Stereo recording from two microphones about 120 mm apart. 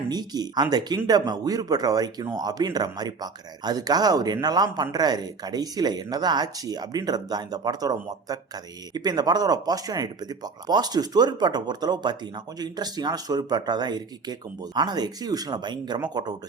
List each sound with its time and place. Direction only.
0.1 s speech: 35° right (ahead or behind)